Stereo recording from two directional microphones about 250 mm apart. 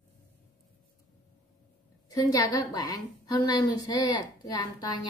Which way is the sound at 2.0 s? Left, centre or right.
Centre.